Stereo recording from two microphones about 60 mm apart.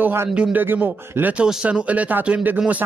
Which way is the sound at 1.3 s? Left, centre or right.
Centre.